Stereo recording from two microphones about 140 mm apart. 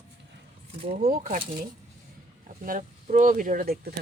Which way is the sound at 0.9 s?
90° right.